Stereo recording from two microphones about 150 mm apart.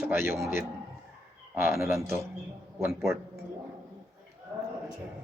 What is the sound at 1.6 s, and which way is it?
Speech, 15° right (ahead or behind).